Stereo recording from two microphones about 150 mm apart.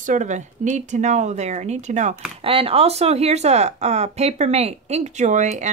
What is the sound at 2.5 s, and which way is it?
Speech, 40° right (ahead or behind).